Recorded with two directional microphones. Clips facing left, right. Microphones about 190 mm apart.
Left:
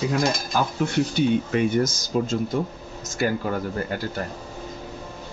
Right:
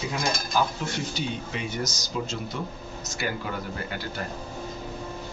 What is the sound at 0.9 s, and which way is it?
Speech, 55° left (ahead or behind).